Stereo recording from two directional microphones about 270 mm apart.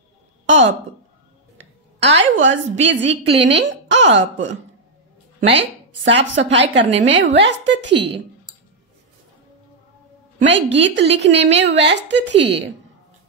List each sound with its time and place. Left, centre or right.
1.6 s a woman's voice: right
10.4 s a woman's voice: right